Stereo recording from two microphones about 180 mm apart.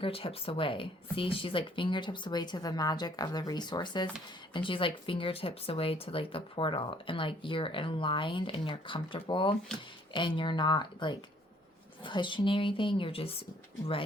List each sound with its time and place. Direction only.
0.0 s speech: 30° left (ahead or behind)